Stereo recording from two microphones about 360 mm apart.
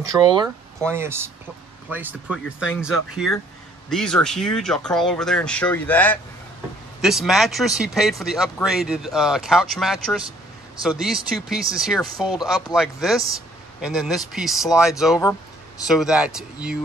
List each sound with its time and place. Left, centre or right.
0.1 s speech: centre